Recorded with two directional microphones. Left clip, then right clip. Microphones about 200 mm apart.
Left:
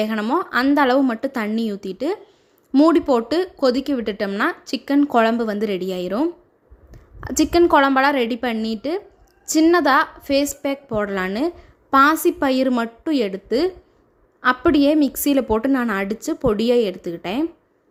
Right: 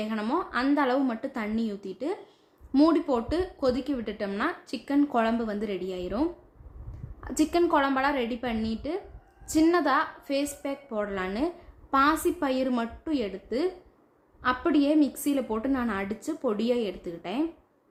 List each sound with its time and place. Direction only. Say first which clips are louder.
0.0 s a woman's voice: left 9 dB; 35° left (ahead or behind)